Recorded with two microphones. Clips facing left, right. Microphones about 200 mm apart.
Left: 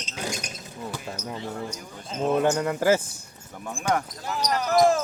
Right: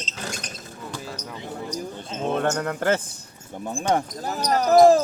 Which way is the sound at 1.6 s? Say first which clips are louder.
Right 6 dB; 30° right (ahead or behind).